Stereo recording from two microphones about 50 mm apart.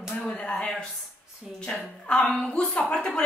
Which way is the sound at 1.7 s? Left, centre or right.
Centre.